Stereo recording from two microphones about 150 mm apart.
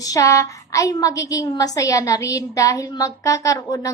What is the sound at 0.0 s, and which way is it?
A woman's voice, 25° left (ahead or behind).